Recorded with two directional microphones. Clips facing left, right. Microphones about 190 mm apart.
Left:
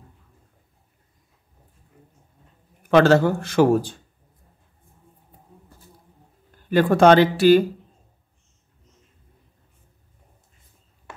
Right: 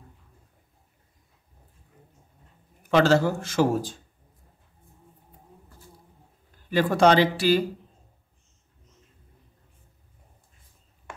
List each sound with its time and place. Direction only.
2.9 s a man's voice: 55° left (ahead or behind)
6.7 s a man's voice: 55° left (ahead or behind)